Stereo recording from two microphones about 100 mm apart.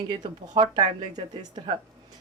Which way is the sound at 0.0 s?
45° right (ahead or behind).